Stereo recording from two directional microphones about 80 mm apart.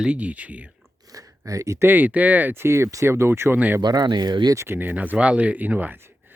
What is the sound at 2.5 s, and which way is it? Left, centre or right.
Speech, right.